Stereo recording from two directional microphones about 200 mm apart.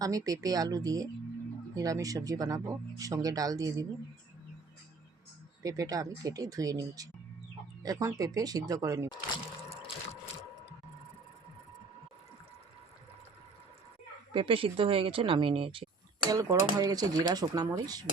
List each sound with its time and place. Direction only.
0.0 s speech: 15° right (ahead or behind)
5.6 s speech: 15° right (ahead or behind)
14.3 s speech: 25° right (ahead or behind)
16.3 s speech: 15° right (ahead or behind)